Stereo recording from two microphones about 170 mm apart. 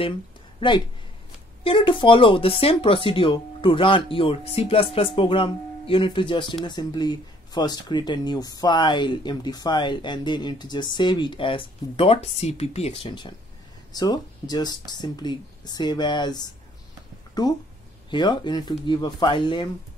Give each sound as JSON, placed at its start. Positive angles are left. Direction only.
{"t": 0.6, "sound": "speech", "side_deg": 30}
{"t": 17.3, "sound": "a sound", "side_deg": 20}
{"t": 18.1, "sound": "speech", "side_deg": 25}